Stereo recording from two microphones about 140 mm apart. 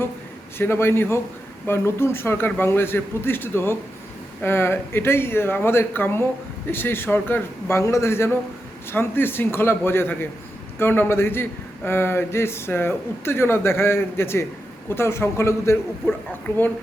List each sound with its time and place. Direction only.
0.6 s a man's voice: 15° left (ahead or behind)